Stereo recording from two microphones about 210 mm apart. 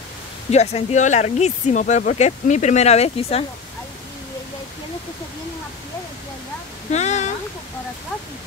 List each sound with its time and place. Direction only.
0.5 s speech: 30° left (ahead or behind)
6.9 s speech: 35° left (ahead or behind)